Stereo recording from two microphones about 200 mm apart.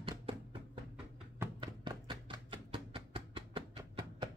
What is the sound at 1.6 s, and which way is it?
Chopping, 25° right (ahead or behind).